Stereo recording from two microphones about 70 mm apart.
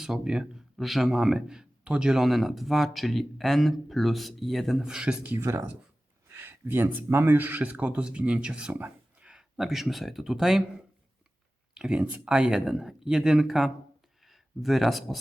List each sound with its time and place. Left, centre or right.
0.0 s speech: centre
4.8 s speech: centre
5.4 s speech: right
6.2 s speech: right; by 8.7 s centre
8.7 s a sound: right
9.2 s speech: centre
11.7 s speech: centre